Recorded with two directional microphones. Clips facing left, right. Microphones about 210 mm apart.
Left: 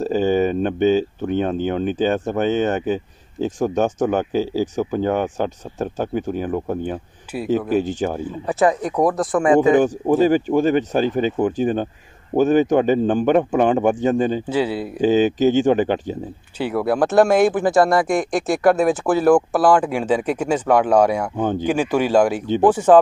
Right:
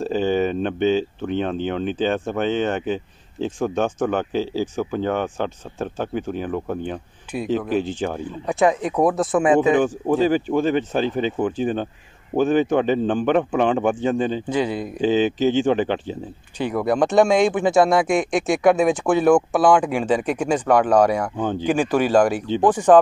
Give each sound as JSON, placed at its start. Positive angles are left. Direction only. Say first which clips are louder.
{"t": 0.0, "sound": "speech", "louder": "left 2 dB", "side_deg": 45}
{"t": 7.3, "sound": "speech", "louder": "even", "side_deg": 5}
{"t": 7.7, "sound": "speech", "louder": "left 3 dB", "side_deg": 40}
{"t": 8.2, "sound": "speech", "louder": "even", "side_deg": 0}
{"t": 9.6, "sound": "speech", "louder": "left 3 dB", "side_deg": 40}
{"t": 14.5, "sound": "speech", "louder": "left 1 dB", "side_deg": 10}
{"t": 15.0, "sound": "speech", "louder": "left 3 dB", "side_deg": 40}
{"t": 16.5, "sound": "speech", "louder": "left 1 dB", "side_deg": 5}
{"t": 21.4, "sound": "speech", "louder": "left 3 dB", "side_deg": 50}
{"t": 21.6, "sound": "speech", "louder": "right 1 dB", "side_deg": 10}